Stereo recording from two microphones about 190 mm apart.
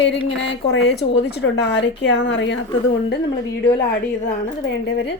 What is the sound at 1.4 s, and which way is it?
Speech, 65° left (ahead or behind).